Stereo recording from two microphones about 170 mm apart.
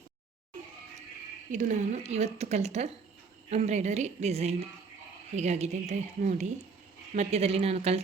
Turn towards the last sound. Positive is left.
turn(degrees=-35)  # may be behind; listen again after turning